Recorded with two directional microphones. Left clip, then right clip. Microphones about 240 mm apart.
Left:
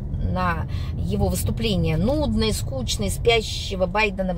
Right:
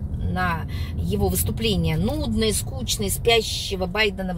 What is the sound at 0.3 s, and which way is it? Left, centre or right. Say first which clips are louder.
Speech: even; left.